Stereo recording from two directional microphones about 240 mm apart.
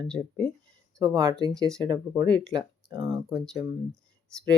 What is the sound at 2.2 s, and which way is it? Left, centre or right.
Speech, centre.